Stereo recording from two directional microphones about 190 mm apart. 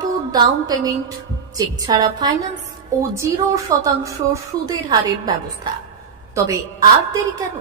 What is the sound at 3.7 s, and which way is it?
A woman's voice, 15° right (ahead or behind).